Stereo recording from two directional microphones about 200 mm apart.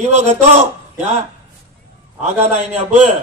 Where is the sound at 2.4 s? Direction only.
35° right (ahead or behind).